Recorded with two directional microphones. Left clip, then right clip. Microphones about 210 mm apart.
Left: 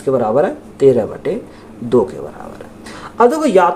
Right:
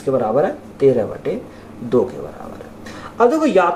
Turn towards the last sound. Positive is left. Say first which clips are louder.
# left 3 dB
turn(degrees=50)  # may be behind; listen again after turning